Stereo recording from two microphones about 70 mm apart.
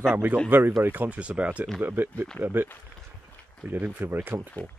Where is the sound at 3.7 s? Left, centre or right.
Right.